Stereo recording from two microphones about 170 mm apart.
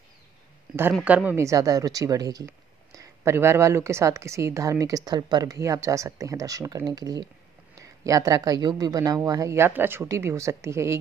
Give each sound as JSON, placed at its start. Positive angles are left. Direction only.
{"t": 1.0, "sound": "speech", "side_deg": -10}